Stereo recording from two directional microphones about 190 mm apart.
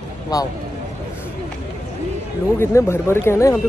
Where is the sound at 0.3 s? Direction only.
20° left (ahead or behind).